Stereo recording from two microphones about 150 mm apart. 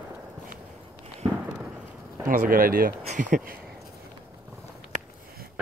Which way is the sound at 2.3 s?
70° right (ahead or behind).